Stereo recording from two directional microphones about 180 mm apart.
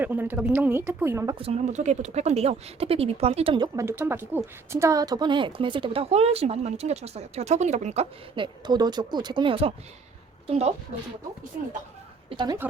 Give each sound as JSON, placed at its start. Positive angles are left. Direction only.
{"t": 0.0, "sound": "speech", "side_deg": -10}
{"t": 1.4, "sound": "speech", "side_deg": -35}